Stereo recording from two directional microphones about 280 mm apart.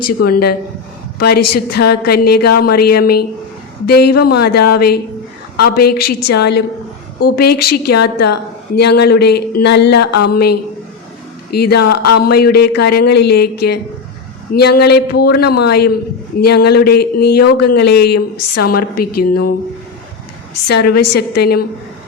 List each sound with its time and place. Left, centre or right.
0.2 s a woman's voice: left
1.7 s a woman's voice: left
20.7 s a woman's voice: left